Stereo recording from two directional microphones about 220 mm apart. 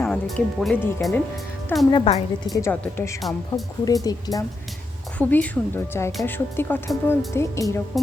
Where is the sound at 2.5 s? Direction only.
10° left (ahead or behind).